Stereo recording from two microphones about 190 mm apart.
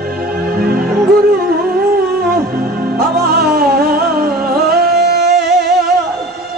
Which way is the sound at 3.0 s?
50° right (ahead or behind).